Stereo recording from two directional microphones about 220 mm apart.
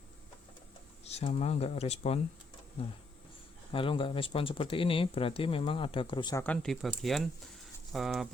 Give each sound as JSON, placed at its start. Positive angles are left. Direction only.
{"t": 1.1, "sound": "speech", "side_deg": 30}
{"t": 3.7, "sound": "speech", "side_deg": 25}
{"t": 6.4, "sound": "speech", "side_deg": 5}